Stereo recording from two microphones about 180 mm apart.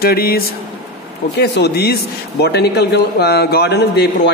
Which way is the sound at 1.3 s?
65° left (ahead or behind).